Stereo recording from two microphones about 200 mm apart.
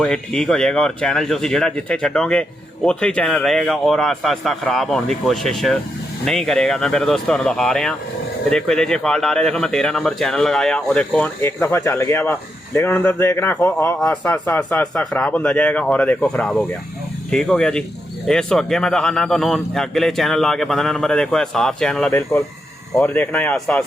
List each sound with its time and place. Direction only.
0.0 s speech: 5° left (ahead or behind)